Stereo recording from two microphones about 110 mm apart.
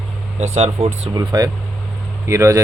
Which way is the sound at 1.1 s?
35° right (ahead or behind).